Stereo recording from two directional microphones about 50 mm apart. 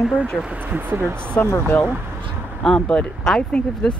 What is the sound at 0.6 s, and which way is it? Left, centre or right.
Speech, right.